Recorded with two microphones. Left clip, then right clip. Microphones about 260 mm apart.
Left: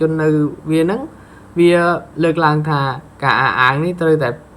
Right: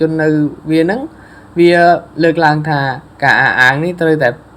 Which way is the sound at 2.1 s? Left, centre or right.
Centre.